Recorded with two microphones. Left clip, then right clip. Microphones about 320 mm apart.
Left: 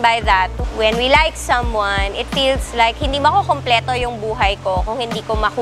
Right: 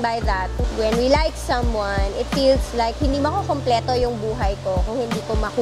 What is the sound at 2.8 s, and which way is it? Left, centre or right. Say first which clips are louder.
Speech: left 6 dB; left.